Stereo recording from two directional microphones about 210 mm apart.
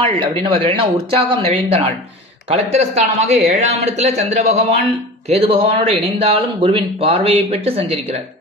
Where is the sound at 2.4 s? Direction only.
30° right (ahead or behind).